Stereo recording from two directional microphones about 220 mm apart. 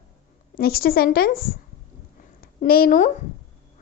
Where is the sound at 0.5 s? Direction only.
45° left (ahead or behind).